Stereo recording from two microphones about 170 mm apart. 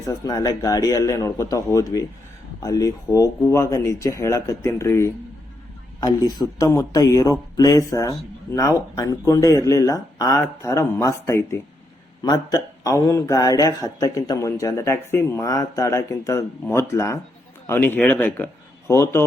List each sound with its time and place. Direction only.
0.0 s a man's voice: 20° left (ahead or behind)